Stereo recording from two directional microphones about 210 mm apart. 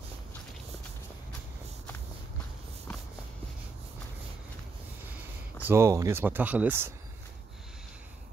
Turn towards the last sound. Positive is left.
turn(degrees=-10)  # may be behind; listen again after turning